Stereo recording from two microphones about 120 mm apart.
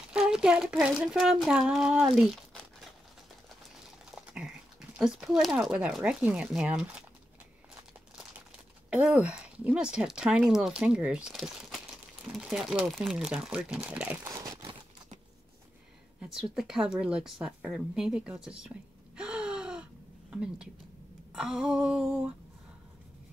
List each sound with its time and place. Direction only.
0.1 s speech: 5° right (ahead or behind)
4.1 s typing: 5° right (ahead or behind)
4.9 s speech: 5° right (ahead or behind)
8.9 s speech: 10° right (ahead or behind)
14.2 s crunch: 30° right (ahead or behind)
16.2 s speech: 5° right (ahead or behind)
19.1 s gasp: 5° right (ahead or behind)
21.3 s speech: 5° right (ahead or behind)